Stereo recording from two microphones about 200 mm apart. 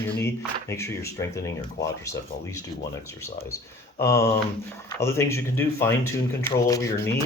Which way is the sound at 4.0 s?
15° left (ahead or behind).